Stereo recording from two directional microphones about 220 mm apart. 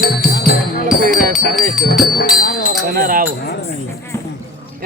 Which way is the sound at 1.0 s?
40° right (ahead or behind).